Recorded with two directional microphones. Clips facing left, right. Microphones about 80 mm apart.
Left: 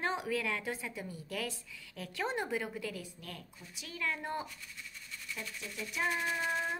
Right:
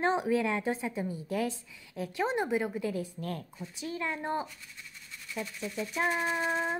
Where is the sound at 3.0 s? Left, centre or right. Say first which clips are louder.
Right 10 dB; right.